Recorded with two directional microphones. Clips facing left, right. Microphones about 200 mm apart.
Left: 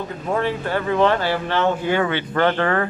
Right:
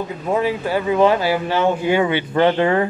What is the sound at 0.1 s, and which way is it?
Speech, 10° right (ahead or behind).